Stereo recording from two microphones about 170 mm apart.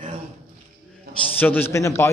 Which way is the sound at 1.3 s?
10° left (ahead or behind).